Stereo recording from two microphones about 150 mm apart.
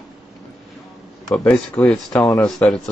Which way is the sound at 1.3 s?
10° left (ahead or behind).